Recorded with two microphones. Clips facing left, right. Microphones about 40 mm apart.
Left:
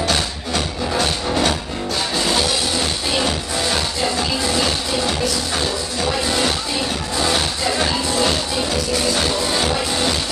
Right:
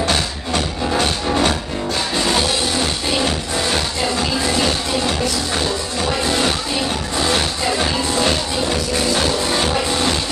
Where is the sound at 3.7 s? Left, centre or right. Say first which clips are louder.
Even; right.